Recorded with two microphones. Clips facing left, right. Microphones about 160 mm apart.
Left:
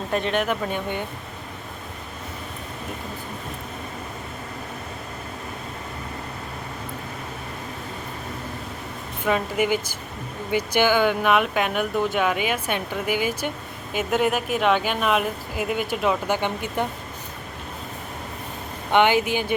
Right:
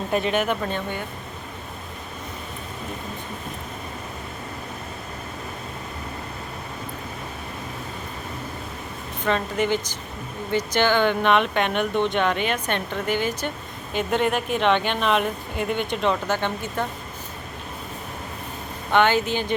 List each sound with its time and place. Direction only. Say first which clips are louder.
0.1 s speech: right 1 dB; 5° right (ahead or behind)
0.7 s speech: left 1 dB; 15° left (ahead or behind)
9.2 s speech: left 1 dB; 10° left (ahead or behind)
18.9 s speech: left 1 dB; 15° left (ahead or behind)